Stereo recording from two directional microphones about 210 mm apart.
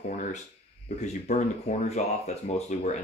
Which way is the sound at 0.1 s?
40° left (ahead or behind).